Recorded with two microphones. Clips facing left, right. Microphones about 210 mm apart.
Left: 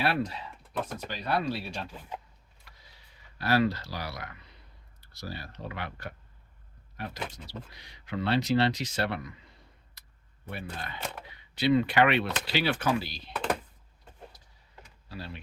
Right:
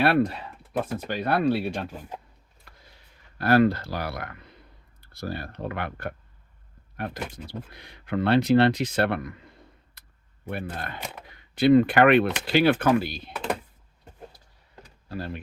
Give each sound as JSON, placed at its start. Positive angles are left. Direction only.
{"t": 0.0, "sound": "speech", "side_deg": -60}
{"t": 3.3, "sound": "speech", "side_deg": -55}
{"t": 10.0, "sound": "a sound", "side_deg": -55}
{"t": 10.5, "sound": "speech", "side_deg": -55}
{"t": 13.3, "sound": "a sound", "side_deg": 0}
{"t": 15.1, "sound": "speech", "side_deg": -50}